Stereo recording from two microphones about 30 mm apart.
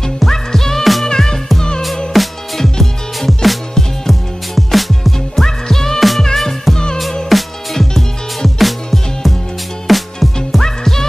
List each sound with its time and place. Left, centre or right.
0.3 s music: centre
2.1 s music: centre
5.4 s music: centre
5.9 s music: centre
10.6 s music: centre